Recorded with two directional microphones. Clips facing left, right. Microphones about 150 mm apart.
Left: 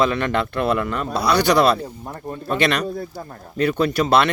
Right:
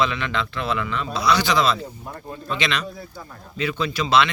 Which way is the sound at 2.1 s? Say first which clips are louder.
Left 6 dB; 40° left (ahead or behind).